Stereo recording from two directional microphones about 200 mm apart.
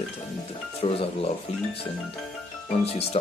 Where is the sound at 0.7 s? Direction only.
30° left (ahead or behind).